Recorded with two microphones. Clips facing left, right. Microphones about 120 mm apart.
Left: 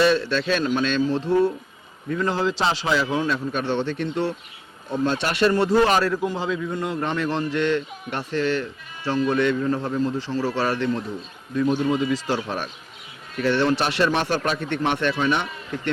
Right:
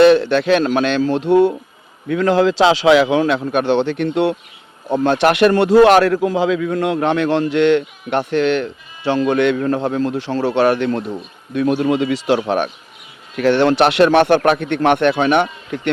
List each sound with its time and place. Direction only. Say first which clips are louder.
0.0 s a man's voice: right 9 dB; 60° right (ahead or behind)
2.0 s a man's voice: right 9 dB; 90° right; by 15.9 s 65° right (ahead or behind)